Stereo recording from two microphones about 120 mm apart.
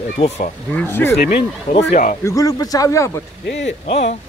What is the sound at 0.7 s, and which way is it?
Speech, 15° left (ahead or behind).